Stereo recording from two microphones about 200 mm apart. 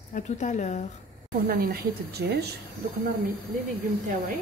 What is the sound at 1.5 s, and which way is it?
Speech, 50° right (ahead or behind).